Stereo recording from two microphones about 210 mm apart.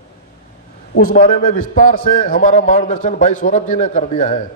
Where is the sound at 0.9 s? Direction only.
45° left (ahead or behind).